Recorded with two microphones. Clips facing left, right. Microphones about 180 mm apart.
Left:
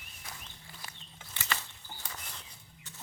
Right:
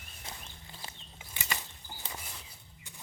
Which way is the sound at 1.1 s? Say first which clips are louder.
Left 2 dB; 15° right (ahead or behind).